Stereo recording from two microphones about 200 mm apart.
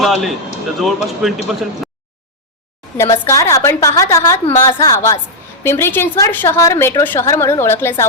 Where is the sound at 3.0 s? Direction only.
15° left (ahead or behind).